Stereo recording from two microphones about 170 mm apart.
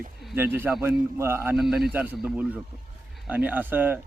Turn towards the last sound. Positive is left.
turn(degrees=-10)  # may be behind; listen again after turning